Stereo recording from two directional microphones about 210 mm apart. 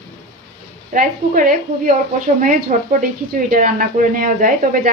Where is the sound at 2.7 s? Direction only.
35° right (ahead or behind).